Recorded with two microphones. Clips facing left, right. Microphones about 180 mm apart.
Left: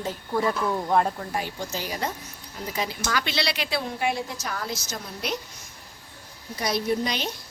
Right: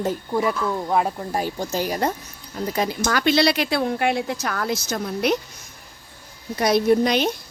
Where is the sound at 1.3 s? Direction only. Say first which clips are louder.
Right 6 dB; 40° right (ahead or behind); by 5.3 s 60° right (ahead or behind).